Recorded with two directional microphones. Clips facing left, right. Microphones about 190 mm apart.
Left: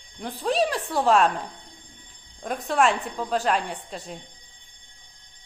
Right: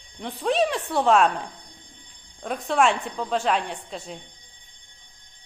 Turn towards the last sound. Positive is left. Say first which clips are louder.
# even
turn(degrees=0)  # may be behind; listen again after turning